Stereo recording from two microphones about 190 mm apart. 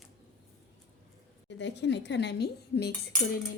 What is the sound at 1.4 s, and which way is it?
A woman's voice, 70° left (ahead or behind).